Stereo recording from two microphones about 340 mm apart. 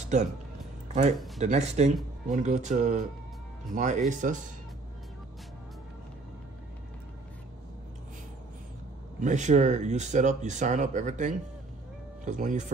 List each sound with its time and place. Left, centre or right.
0.1 s speech: right
1.4 s speech: centre
9.2 s speech: right